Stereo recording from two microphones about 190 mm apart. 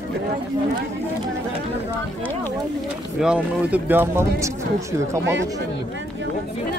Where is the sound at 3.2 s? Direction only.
5° right (ahead or behind).